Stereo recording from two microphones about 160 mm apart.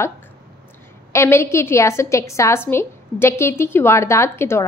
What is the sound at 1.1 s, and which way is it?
A woman's voice, 15° left (ahead or behind).